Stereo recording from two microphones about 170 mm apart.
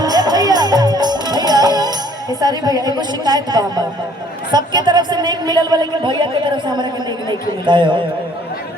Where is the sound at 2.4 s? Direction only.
20° right (ahead or behind).